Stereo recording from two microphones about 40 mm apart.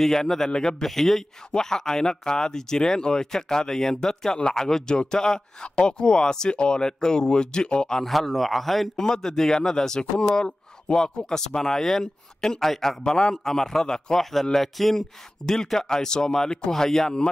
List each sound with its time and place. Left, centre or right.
0.0 s speech: centre
8.0 s a man's voice: centre
8.9 s a man's voice: centre